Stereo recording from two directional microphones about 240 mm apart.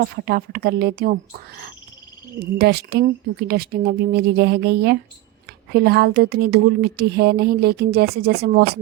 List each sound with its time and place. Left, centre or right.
0.0 s speech: right